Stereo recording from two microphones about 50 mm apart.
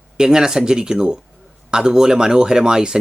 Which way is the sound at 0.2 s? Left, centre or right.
Centre.